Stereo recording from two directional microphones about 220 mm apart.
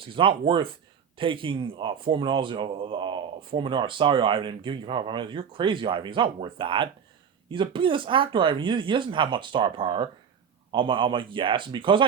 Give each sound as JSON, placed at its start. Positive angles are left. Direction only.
{"t": 0.0, "sound": "speech", "side_deg": -25}